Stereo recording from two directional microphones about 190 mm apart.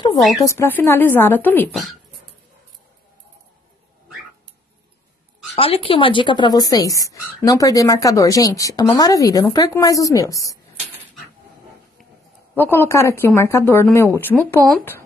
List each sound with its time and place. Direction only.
0.4 s speech: 15° left (ahead or behind)
5.6 s speech: 30° left (ahead or behind)
12.5 s speech: 10° left (ahead or behind)